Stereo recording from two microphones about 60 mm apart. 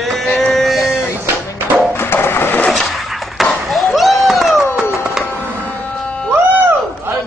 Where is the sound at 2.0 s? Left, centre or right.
Left.